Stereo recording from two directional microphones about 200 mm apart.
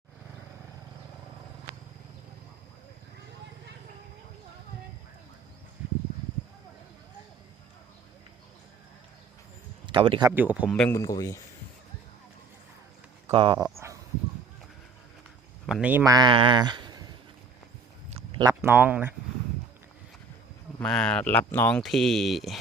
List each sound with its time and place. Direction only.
9.8 s speech: 25° right (ahead or behind)
10.3 s speech: 10° right (ahead or behind)
10.8 s speech: 10° left (ahead or behind)
13.3 s speech: 25° right (ahead or behind)
13.6 s a sound: 15° right (ahead or behind)
15.6 s a man's voice: 5° right (ahead or behind); by 17.1 s 20° right (ahead or behind)
18.4 s speech: 10° right (ahead or behind)
20.7 s speech: 5° left (ahead or behind)